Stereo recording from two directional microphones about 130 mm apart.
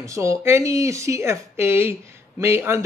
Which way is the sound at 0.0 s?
25° right (ahead or behind).